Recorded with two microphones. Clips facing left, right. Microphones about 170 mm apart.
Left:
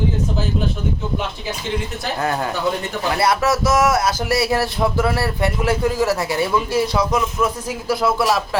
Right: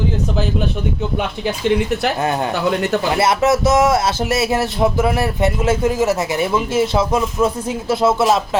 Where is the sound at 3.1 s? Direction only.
20° right (ahead or behind).